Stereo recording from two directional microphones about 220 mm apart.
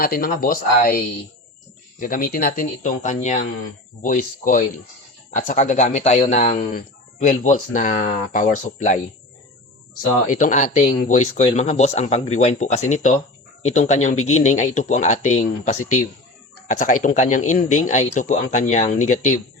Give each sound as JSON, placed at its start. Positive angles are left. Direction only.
{"t": 0.0, "sound": "speech", "side_deg": 40}
{"t": 10.2, "sound": "speech", "side_deg": 35}